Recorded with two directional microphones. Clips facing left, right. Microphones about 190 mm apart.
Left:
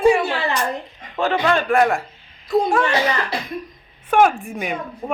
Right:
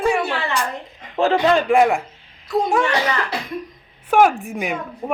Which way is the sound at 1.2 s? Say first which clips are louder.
Right 3 dB; 25° right (ahead or behind).